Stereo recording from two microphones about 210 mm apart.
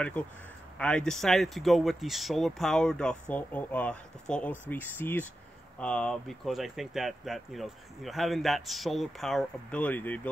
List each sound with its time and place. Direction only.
0.7 s speech: 5° left (ahead or behind)